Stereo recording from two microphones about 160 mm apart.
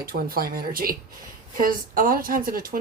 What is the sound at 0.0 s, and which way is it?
A woman's voice, 65° right (ahead or behind).